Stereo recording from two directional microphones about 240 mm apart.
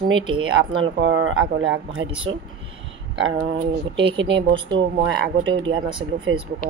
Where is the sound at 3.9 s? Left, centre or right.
Right.